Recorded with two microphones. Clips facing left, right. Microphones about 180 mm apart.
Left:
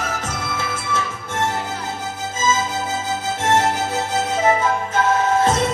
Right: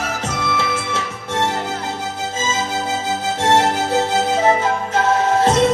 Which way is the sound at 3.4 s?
30° right (ahead or behind).